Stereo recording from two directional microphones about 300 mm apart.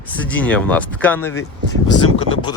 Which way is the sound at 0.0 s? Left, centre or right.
Centre.